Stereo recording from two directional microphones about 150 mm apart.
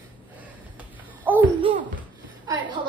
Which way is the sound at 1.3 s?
10° right (ahead or behind).